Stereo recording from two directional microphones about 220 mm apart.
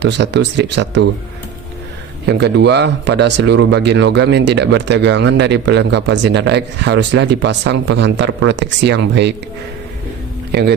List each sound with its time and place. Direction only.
0.0 s speech: 50° right (ahead or behind)
2.2 s speech: 50° right (ahead or behind)
10.5 s speech: 45° right (ahead or behind)